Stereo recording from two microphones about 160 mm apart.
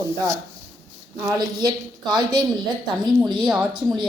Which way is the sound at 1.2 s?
25° right (ahead or behind).